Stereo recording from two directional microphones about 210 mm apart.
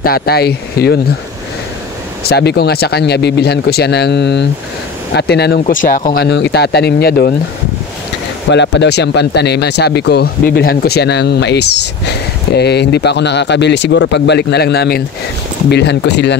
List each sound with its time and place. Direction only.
0.0 s speech: 45° left (ahead or behind)
2.2 s speech: 50° left (ahead or behind)
8.5 s speech: 55° left (ahead or behind)